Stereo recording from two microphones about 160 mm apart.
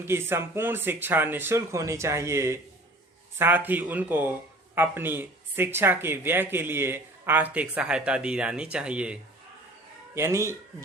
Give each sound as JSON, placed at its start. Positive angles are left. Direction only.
{"t": 0.0, "sound": "speech", "side_deg": -15}
{"t": 10.2, "sound": "speech", "side_deg": -15}